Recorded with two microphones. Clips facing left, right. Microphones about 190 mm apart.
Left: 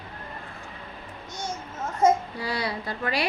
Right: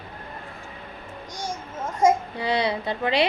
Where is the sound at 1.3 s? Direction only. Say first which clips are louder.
Right 1 dB; 10° right (ahead or behind).